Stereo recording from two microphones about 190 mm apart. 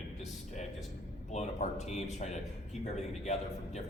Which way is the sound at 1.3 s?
35° left (ahead or behind).